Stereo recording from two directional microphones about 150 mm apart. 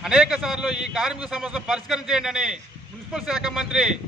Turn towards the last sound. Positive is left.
turn(degrees=-5)  # may be behind; listen again after turning